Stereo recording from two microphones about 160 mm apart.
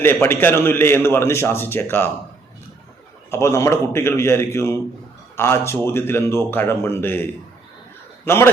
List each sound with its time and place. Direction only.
0.0 s a man's voice: 15° left (ahead or behind)
3.3 s a man's voice: 20° left (ahead or behind)